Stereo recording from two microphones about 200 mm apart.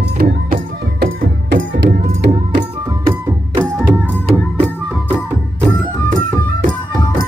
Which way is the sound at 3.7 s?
5° right (ahead or behind).